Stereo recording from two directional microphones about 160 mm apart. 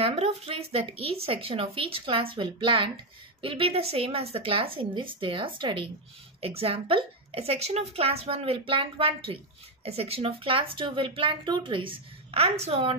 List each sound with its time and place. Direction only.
0.0 s speech: 40° right (ahead or behind)